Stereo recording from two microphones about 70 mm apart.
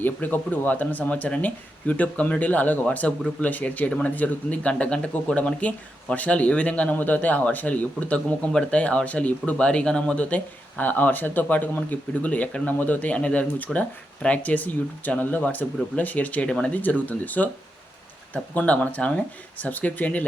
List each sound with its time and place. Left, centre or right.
0.0 s speech: left
18.5 s speech: centre